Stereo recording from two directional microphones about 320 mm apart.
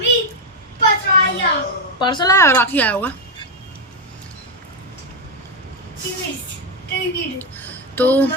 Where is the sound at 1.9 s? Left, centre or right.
Centre.